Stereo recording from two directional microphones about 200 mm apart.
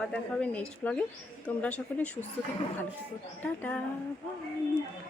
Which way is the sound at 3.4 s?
5° left (ahead or behind).